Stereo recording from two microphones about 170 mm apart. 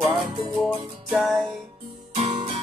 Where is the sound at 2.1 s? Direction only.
35° right (ahead or behind).